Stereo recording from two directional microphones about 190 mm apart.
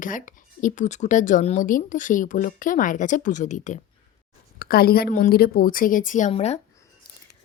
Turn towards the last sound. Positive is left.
turn(degrees=35)  # may be behind; listen again after turning